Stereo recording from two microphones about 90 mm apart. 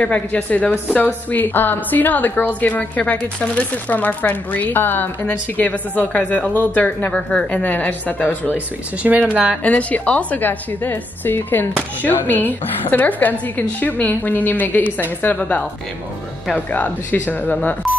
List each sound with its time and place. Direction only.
0.0 s a woman's voice: 15° left (ahead or behind)
9.0 s speech: 15° right (ahead or behind)
9.6 s a woman's voice: 15° left (ahead or behind)